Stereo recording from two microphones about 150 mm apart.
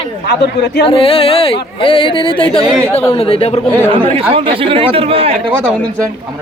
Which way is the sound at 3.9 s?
35° right (ahead or behind).